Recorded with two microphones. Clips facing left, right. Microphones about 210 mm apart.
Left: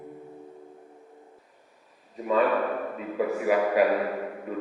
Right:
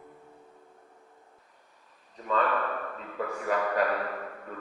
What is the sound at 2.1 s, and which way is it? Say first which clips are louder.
A man's voice: left 5 dB; 10° left (ahead or behind).